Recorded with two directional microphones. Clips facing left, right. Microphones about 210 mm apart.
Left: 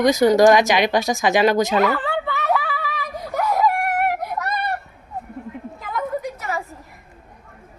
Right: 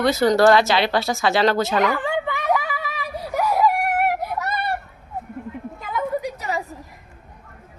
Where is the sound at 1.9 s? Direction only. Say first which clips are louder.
Even; 15° right (ahead or behind).